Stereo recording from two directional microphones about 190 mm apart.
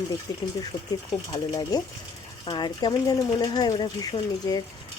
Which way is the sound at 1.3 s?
20° left (ahead or behind).